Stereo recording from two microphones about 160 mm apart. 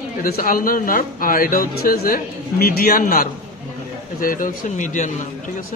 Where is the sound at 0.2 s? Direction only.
65° left (ahead or behind).